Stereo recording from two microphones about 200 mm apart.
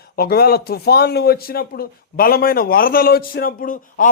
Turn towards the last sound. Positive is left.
turn(degrees=40)  # may be behind; listen again after turning